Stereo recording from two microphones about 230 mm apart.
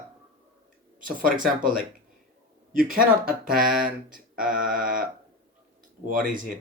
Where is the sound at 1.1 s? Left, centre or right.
Right.